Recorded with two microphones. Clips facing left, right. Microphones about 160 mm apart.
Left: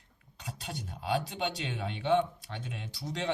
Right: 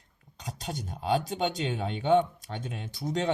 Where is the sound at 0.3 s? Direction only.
40° right (ahead or behind).